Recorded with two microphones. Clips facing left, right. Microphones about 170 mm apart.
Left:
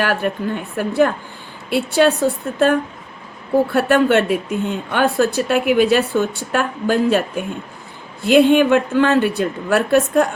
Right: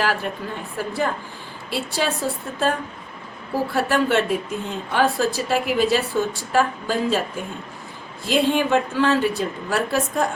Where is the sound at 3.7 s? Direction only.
60° left (ahead or behind).